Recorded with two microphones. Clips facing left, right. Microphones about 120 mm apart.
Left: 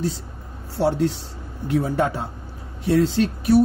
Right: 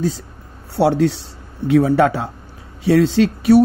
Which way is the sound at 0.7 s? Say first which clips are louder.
Right 5 dB; 85° right.